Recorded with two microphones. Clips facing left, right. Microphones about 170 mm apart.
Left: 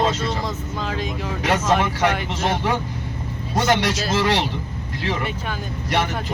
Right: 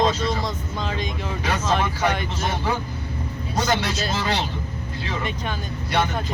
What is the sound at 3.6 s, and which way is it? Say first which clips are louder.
Speech: left 4 dB; 85° left.